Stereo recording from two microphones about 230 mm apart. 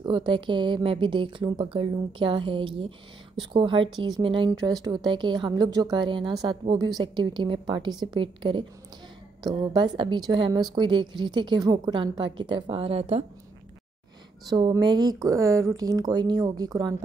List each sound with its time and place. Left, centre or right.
0.0 s a woman's voice: right
14.5 s speech: centre